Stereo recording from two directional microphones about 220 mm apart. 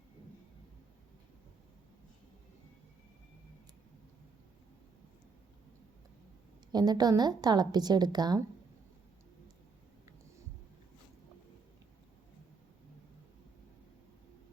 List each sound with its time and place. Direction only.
6.7 s a woman's voice: 20° right (ahead or behind)